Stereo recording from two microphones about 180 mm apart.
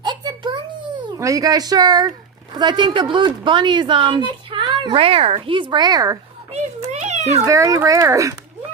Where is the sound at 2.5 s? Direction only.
25° right (ahead or behind).